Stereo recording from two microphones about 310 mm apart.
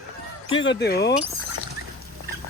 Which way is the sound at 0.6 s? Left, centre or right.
Left.